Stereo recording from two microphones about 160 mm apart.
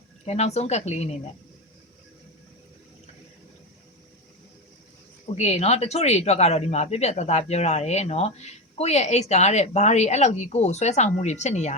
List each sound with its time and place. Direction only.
0.3 s speech: 40° left (ahead or behind)
5.3 s speech: 45° left (ahead or behind)